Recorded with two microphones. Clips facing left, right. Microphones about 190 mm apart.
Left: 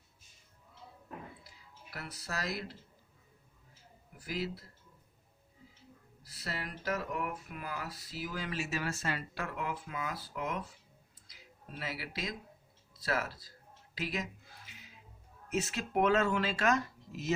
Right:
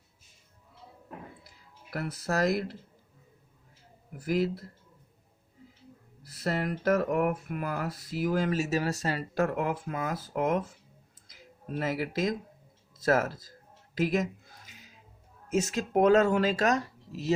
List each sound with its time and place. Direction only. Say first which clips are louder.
1.9 s speech: right 11 dB; 50° right (ahead or behind)
4.2 s speech: right 10 dB; 50° right (ahead or behind)
6.2 s speech: right 11 dB; 50° right (ahead or behind)
13.9 s a sound: right 10 dB; 45° right (ahead or behind)
15.5 s speech: right 6 dB; 40° right (ahead or behind)